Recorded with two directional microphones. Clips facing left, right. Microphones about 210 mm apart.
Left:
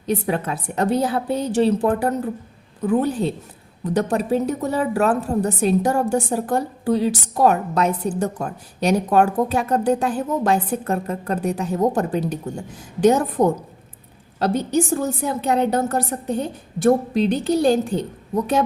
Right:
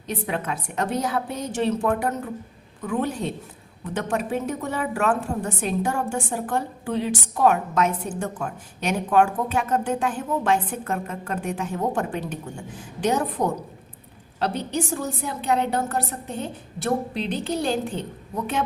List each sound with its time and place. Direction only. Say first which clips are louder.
0.1 s a woman's voice: left 6 dB; 40° left (ahead or behind)